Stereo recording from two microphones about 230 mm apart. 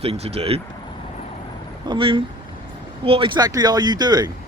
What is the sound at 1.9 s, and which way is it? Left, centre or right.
Speech, right.